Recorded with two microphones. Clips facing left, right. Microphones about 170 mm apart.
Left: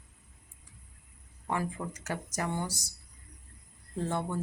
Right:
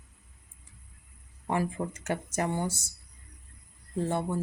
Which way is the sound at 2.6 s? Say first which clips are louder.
Right 5 dB; 10° left (ahead or behind).